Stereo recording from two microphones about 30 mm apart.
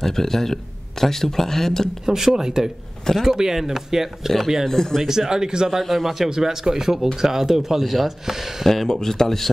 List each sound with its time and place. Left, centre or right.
0.0 s speech: centre
2.0 s speech: centre
4.6 s speech: centre
5.0 s speech: centre
5.7 s speech: centre
6.3 s speech: centre
7.8 s speech: centre
8.8 s speech: left